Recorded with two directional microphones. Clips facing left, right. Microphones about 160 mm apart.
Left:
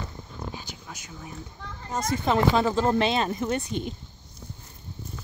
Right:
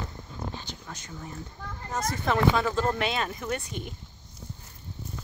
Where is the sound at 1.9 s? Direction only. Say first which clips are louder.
Left 3 dB; 15° left (ahead or behind).